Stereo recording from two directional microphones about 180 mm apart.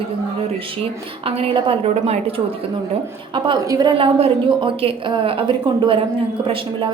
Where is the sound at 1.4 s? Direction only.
30° right (ahead or behind).